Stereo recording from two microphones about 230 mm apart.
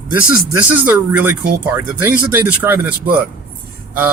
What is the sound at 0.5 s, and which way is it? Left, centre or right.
Speech, centre.